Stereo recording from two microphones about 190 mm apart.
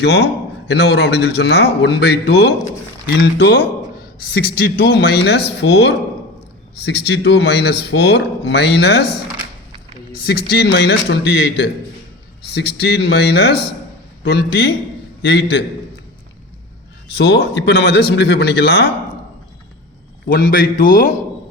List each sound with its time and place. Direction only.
0.0 s speech: 65° left (ahead or behind)
10.2 s speech: 55° left (ahead or behind)
17.2 s speech: 60° left (ahead or behind)
20.2 s speech: 55° left (ahead or behind)